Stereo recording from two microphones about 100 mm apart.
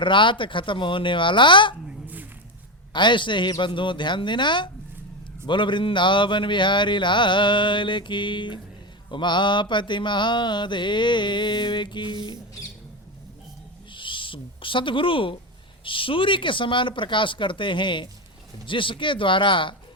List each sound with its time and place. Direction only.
0.0 s speech: 55° left (ahead or behind)
2.9 s speech: 50° left (ahead or behind)
13.9 s a sound: 55° left (ahead or behind)
15.8 s speech: 60° left (ahead or behind)